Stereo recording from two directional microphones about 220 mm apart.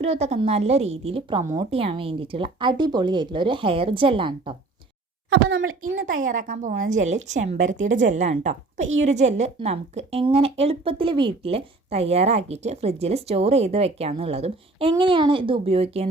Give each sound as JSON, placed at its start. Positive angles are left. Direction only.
{"t": 0.0, "sound": "a woman's voice", "side_deg": -30}
{"t": 5.3, "sound": "a child's voice", "side_deg": -65}
{"t": 6.1, "sound": "a woman's voice", "side_deg": -35}